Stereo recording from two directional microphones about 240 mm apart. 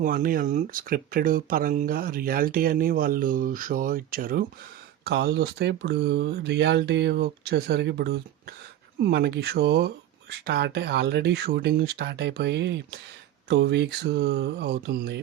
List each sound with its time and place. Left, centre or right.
0.0 s speech: right